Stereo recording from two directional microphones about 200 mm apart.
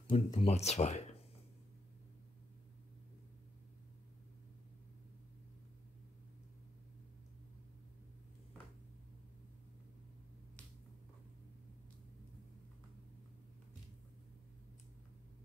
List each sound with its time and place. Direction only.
0.1 s speech: 35° left (ahead or behind)